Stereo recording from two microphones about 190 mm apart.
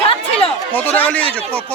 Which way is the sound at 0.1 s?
30° left (ahead or behind).